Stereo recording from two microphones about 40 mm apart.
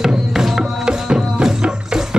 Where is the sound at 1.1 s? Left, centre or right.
Right.